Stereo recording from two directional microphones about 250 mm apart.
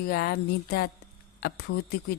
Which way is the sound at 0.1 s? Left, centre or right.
Left.